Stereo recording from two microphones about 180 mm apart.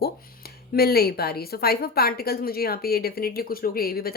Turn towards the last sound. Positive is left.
turn(degrees=55)  # may be behind; listen again after turning